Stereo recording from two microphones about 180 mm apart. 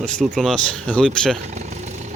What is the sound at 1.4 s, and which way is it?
Vehicle, 40° right (ahead or behind).